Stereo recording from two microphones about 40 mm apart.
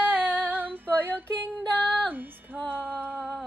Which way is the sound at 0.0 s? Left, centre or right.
Right.